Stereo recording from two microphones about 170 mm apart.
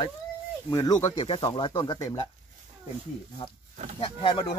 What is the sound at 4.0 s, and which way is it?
Speech, 30° left (ahead or behind).